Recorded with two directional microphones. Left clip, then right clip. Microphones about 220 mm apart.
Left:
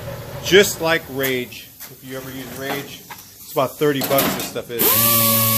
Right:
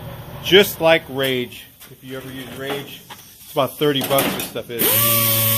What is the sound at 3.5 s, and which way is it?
Speech, 20° right (ahead or behind).